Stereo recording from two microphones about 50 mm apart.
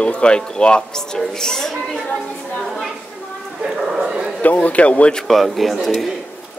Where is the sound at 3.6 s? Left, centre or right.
Centre.